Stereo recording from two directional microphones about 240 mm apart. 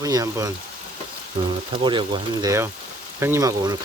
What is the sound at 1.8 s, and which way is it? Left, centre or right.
Speech, centre.